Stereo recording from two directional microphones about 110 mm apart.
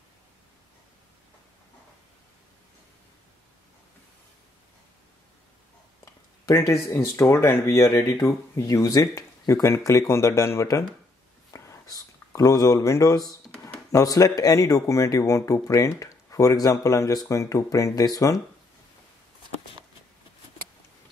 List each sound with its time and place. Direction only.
6.4 s speech: 25° left (ahead or behind)
11.5 s a sound: 30° left (ahead or behind)
13.9 s speech: 30° left (ahead or behind)
15.7 s speech: 20° left (ahead or behind)
16.0 s speech: 30° left (ahead or behind)